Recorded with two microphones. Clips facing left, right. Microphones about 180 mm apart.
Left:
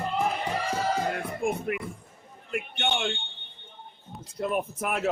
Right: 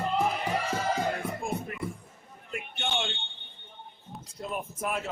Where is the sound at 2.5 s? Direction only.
65° left (ahead or behind).